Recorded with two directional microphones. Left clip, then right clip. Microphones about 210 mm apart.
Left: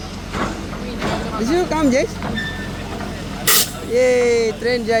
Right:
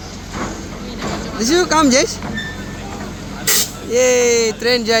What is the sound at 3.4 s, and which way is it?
Speech, centre (ahead or behind).